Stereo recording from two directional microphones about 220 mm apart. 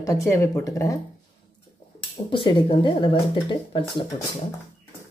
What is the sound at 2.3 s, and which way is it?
Speech, 20° left (ahead or behind).